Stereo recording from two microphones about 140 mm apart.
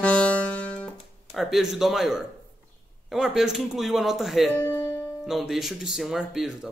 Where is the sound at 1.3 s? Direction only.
Centre (ahead or behind).